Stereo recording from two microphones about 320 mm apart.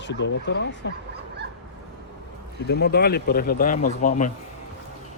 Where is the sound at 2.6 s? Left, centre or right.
Left.